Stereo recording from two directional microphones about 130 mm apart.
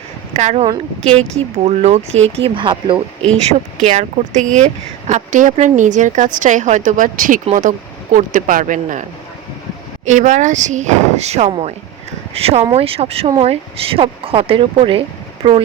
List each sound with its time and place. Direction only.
0.3 s speech: 60° right (ahead or behind); by 3.2 s 40° right (ahead or behind)
3.8 s a woman's voice: 70° right (ahead or behind); by 7.4 s 90° right
8.1 s speech: 80° right
10.1 s a woman's voice: 65° right (ahead or behind); by 15.6 s 50° right (ahead or behind)